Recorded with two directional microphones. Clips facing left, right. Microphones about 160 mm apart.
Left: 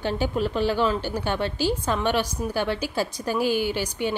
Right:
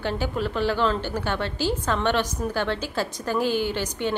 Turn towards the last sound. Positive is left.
turn(degrees=10)  # may be behind; listen again after turning